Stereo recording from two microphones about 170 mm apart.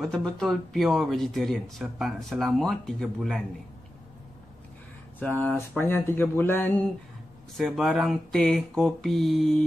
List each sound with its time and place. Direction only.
0.0 s speech: 5° left (ahead or behind)
5.2 s speech: 10° left (ahead or behind)
7.5 s speech: centre (ahead or behind)